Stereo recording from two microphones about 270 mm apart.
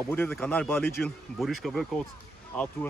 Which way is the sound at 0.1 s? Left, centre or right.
Centre.